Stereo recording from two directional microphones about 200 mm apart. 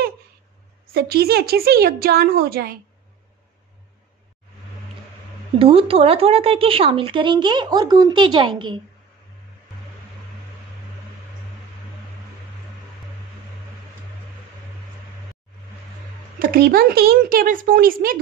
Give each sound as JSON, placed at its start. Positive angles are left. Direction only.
{"t": 0.9, "sound": "a woman's voice", "side_deg": -50}
{"t": 5.6, "sound": "speech", "side_deg": -30}
{"t": 16.3, "sound": "a woman's voice", "side_deg": -45}